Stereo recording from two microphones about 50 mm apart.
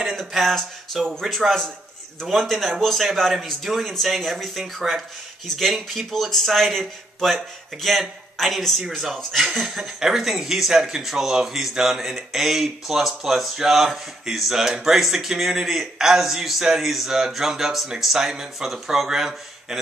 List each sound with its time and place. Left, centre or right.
0.2 s speech: centre